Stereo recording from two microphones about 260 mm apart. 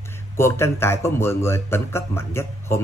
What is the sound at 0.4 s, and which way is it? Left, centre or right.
A man's voice, centre.